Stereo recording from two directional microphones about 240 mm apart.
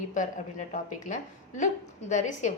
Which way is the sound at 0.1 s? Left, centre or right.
Left.